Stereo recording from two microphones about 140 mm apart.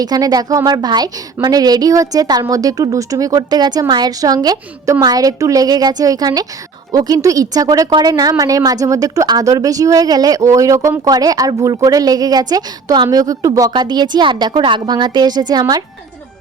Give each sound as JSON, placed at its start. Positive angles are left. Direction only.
{"t": 0.0, "sound": "a woman's voice", "side_deg": -30}